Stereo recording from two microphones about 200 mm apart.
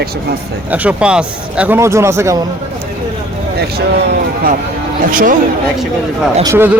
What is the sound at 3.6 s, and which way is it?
Speech, 55° right (ahead or behind).